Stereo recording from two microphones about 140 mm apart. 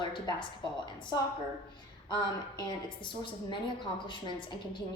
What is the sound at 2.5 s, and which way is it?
A woman's voice, 30° left (ahead or behind).